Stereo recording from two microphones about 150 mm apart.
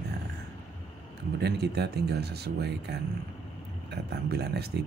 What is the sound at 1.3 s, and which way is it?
Speech, 90° right.